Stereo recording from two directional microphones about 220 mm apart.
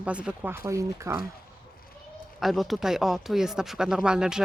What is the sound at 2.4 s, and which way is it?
Speech, centre (ahead or behind).